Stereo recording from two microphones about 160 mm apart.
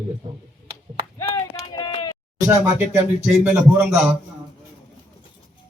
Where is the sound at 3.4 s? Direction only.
10° right (ahead or behind).